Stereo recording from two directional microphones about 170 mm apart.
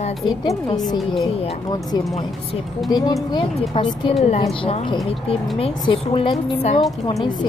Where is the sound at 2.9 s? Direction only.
25° left (ahead or behind).